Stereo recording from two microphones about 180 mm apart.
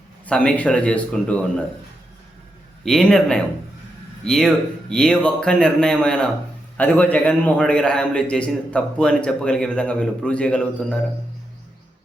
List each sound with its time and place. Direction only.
0.3 s speech: 5° left (ahead or behind)
2.8 s a man's voice: 5° left (ahead or behind)